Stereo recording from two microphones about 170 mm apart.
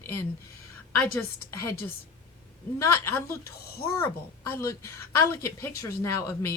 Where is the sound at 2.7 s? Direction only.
15° left (ahead or behind).